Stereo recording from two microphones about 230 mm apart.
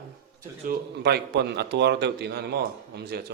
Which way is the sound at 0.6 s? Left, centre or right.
Right.